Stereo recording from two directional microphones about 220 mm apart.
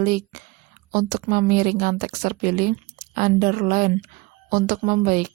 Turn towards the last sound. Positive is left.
turn(degrees=-40)  # may be behind; listen again after turning